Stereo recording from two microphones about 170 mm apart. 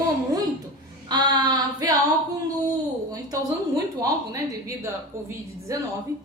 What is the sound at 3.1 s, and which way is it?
A woman's voice, 20° right (ahead or behind).